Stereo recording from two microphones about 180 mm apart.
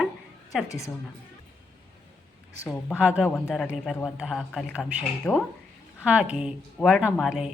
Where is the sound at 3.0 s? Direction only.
5° right (ahead or behind).